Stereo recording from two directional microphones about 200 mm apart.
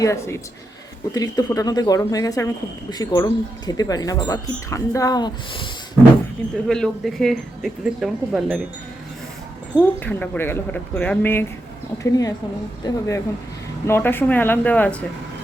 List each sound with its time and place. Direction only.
0.0 s speech: 15° left (ahead or behind)
6.7 s speech: 5° left (ahead or behind)
9.7 s speech: 10° left (ahead or behind)